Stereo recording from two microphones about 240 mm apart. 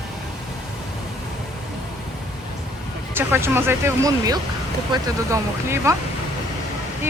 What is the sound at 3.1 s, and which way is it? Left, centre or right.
Speech, centre.